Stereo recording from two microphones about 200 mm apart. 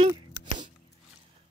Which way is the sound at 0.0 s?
20° right (ahead or behind).